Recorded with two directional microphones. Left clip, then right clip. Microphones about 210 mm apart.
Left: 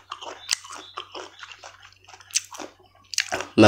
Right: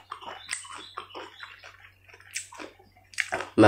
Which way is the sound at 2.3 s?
35° left (ahead or behind).